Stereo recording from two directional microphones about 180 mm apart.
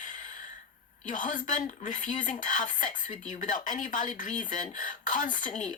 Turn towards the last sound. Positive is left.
turn(degrees=45)  # may be behind; listen again after turning